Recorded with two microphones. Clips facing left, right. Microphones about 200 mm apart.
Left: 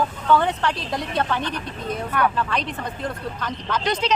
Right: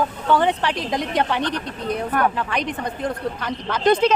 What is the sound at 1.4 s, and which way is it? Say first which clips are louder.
Speech: right 3 dB; 70° right (ahead or behind).